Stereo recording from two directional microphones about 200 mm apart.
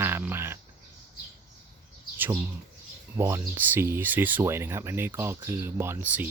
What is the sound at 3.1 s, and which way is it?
Speech, 10° right (ahead or behind).